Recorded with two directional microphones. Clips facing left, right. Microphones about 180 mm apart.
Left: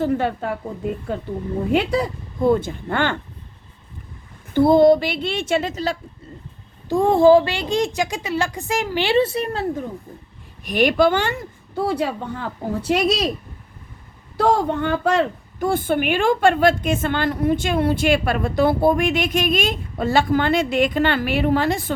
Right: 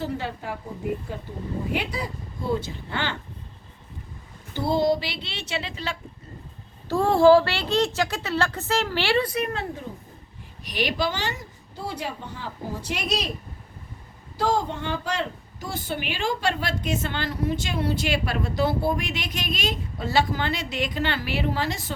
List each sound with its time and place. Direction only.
0.0 s a woman's voice: 60° left (ahead or behind)
4.5 s a woman's voice: 55° left (ahead or behind)
6.8 s a woman's voice: 15° left (ahead or behind); by 9.6 s 30° left (ahead or behind)
10.6 s a woman's voice: 50° left (ahead or behind)
14.3 s a woman's voice: 60° left (ahead or behind)